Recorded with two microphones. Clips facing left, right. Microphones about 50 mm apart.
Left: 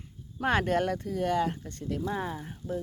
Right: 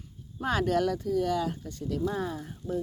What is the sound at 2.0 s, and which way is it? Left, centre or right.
Speech, left.